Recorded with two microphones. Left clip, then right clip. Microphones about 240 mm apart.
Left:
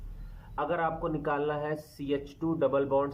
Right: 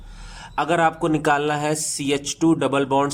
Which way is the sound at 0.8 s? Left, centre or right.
Right.